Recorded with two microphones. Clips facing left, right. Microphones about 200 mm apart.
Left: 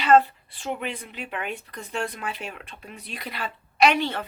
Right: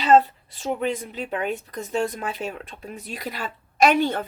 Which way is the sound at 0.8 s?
40° right (ahead or behind).